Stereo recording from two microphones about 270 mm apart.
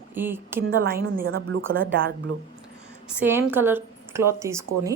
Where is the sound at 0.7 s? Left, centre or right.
Right.